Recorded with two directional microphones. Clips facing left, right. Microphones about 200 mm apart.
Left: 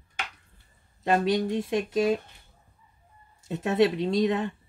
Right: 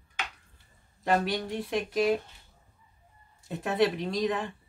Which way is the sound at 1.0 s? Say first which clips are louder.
Left 4 dB; 20° left (ahead or behind).